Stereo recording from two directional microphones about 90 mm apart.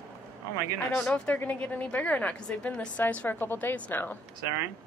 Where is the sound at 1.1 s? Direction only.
15° left (ahead or behind).